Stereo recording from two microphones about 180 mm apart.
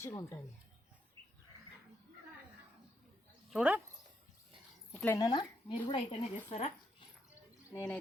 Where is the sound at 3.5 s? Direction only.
5° right (ahead or behind).